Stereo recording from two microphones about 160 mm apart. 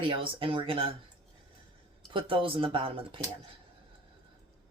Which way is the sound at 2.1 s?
35° right (ahead or behind).